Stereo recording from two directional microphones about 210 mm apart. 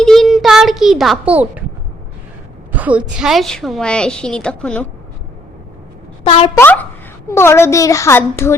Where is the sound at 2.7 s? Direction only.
5° right (ahead or behind).